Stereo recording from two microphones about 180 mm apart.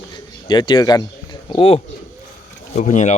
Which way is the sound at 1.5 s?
30° left (ahead or behind).